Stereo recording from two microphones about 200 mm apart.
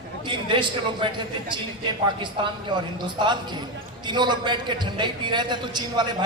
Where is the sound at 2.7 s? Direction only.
20° right (ahead or behind).